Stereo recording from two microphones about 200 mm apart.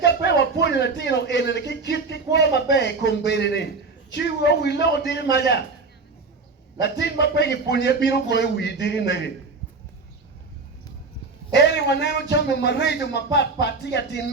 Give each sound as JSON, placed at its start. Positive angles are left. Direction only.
{"t": 0.0, "sound": "a sound", "side_deg": 60}
{"t": 4.1, "sound": "speech", "side_deg": 55}
{"t": 6.8, "sound": "speech", "side_deg": 55}
{"t": 11.5, "sound": "speech", "side_deg": 60}